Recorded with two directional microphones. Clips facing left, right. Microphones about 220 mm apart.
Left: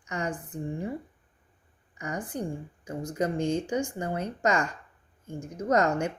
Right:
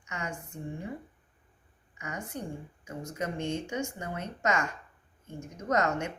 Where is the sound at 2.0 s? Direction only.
35° left (ahead or behind).